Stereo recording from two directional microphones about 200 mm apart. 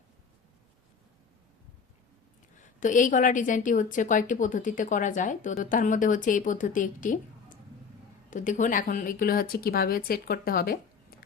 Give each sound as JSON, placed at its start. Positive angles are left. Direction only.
{"t": 2.8, "sound": "a woman's voice", "side_deg": 40}
{"t": 8.3, "sound": "speech", "side_deg": 40}